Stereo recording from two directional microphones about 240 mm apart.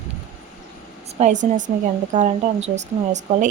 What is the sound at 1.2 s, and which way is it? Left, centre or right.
Speech, right.